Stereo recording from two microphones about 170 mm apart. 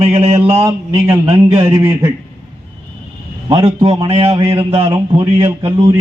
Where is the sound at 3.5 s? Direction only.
30° right (ahead or behind).